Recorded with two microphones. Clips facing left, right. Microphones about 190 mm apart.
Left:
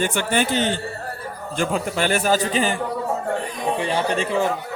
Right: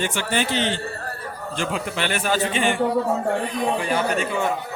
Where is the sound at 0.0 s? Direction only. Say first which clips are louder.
Left 3 dB; 50° left (ahead or behind).